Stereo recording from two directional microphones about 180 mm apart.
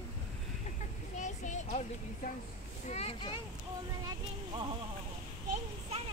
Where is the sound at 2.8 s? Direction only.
35° left (ahead or behind).